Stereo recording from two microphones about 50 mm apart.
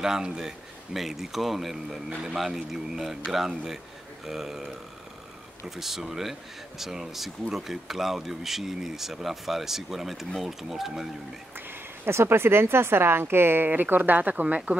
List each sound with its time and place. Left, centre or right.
0.0 s speech: centre
5.8 s speech: centre
12.0 s speech: right
13.7 s speech: right